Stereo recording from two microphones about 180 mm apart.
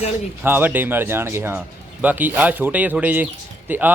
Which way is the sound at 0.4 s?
10° right (ahead or behind).